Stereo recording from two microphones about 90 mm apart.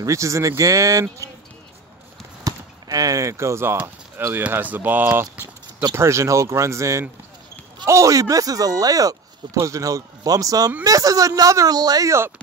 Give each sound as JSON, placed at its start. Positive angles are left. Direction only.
{"t": 0.0, "sound": "speech", "side_deg": -35}
{"t": 2.4, "sound": "speech", "side_deg": -45}